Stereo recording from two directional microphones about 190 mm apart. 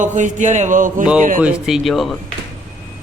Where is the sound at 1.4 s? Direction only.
Centre (ahead or behind).